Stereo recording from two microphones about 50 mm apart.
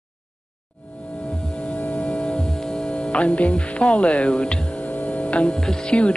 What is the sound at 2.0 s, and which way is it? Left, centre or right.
Music, left.